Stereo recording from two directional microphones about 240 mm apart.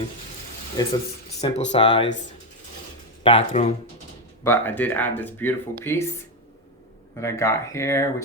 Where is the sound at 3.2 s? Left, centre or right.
Left.